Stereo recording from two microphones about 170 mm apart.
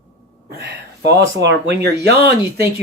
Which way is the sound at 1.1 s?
90° right.